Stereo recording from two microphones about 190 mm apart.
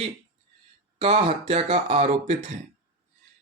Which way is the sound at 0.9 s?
30° right (ahead or behind).